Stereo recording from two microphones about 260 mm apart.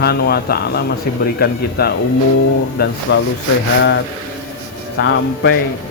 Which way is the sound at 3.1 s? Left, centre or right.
Left.